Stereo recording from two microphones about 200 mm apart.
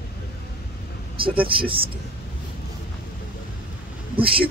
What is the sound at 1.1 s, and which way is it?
Speech, 25° right (ahead or behind).